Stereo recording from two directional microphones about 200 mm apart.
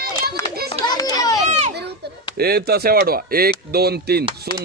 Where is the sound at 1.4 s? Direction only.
35° right (ahead or behind).